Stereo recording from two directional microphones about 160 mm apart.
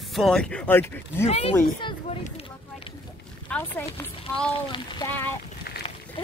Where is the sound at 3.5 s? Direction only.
10° left (ahead or behind).